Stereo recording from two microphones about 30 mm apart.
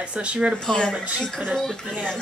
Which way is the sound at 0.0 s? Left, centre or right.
Right.